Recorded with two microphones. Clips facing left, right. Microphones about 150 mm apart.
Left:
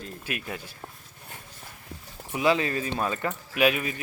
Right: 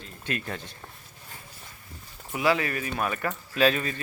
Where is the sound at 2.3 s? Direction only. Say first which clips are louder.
Left 1 dB; 20° left (ahead or behind).